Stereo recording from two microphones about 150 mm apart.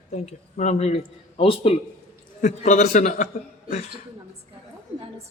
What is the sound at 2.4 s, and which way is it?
Speech, 50° left (ahead or behind).